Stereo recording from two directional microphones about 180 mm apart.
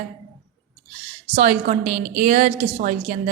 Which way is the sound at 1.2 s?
40° right (ahead or behind).